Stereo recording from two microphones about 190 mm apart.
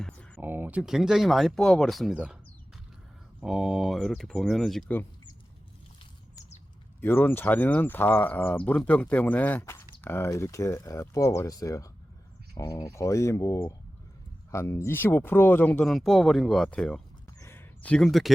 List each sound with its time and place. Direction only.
0.3 s speech: 10° right (ahead or behind)
3.4 s speech: centre (ahead or behind)
7.0 s speech: 10° left (ahead or behind)
17.4 s a sound: 10° left (ahead or behind)